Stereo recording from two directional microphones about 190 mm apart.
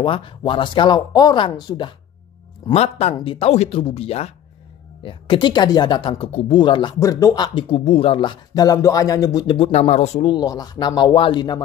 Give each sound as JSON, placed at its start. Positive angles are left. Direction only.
{"t": 0.0, "sound": "speech", "side_deg": 25}
{"t": 2.7, "sound": "speech", "side_deg": 35}
{"t": 10.3, "sound": "speech", "side_deg": 20}